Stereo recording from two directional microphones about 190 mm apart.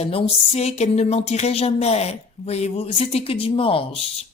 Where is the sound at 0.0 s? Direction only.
30° left (ahead or behind).